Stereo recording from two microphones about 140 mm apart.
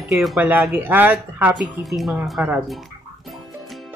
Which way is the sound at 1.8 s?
Centre (ahead or behind).